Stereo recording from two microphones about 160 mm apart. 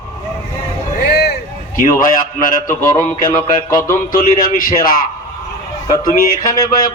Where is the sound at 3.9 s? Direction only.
60° left (ahead or behind).